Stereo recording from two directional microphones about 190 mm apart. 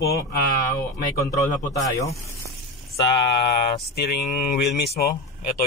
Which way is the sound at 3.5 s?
60° left (ahead or behind).